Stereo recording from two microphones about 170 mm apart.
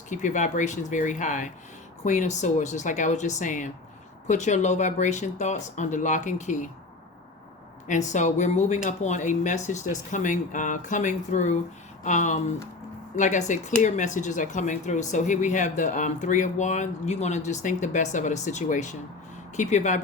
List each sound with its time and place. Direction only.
0.1 s speech: 45° left (ahead or behind)
7.9 s speech: 45° left (ahead or behind)